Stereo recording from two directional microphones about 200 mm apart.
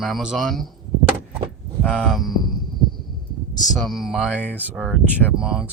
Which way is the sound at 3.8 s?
Centre (ahead or behind).